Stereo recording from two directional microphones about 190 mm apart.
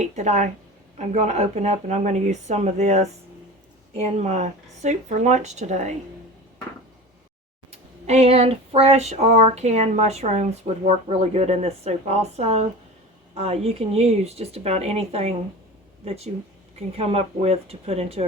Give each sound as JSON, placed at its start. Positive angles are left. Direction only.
{"t": 0.0, "sound": "speech", "side_deg": -40}
{"t": 7.7, "sound": "speech", "side_deg": -35}